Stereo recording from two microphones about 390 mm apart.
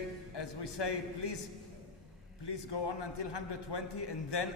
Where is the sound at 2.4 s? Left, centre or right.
Left.